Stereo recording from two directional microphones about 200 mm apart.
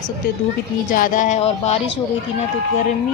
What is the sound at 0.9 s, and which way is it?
Speech, 40° left (ahead or behind).